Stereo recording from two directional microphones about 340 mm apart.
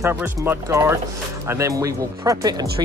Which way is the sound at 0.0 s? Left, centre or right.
Centre.